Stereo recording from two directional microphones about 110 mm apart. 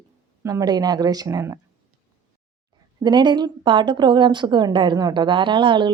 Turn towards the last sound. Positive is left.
turn(degrees=-45)  # may be behind; listen again after turning